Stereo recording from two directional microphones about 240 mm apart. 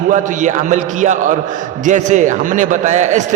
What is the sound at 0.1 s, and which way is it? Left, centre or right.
A man's voice, right.